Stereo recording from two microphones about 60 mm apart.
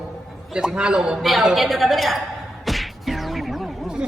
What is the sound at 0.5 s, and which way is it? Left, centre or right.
A man's voice, centre.